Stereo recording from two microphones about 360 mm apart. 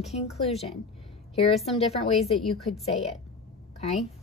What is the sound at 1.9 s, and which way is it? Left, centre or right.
Speech, centre.